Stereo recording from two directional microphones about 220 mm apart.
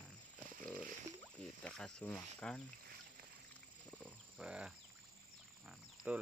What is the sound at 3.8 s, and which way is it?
Wild animals, centre (ahead or behind).